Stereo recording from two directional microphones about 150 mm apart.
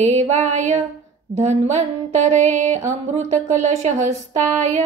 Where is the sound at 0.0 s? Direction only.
50° right (ahead or behind).